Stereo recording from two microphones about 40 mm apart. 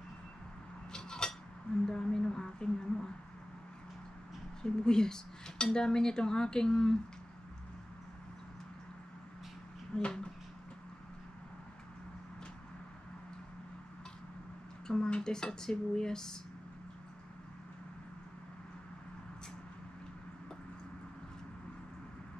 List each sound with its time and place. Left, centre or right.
0.9 s cutlery: centre
1.9 s a sound: centre
4.6 s cutlery: centre
9.9 s speech: left
14.9 s speech: left